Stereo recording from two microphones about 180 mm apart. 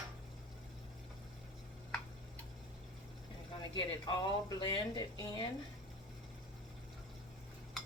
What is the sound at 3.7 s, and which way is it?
Speech, 25° left (ahead or behind).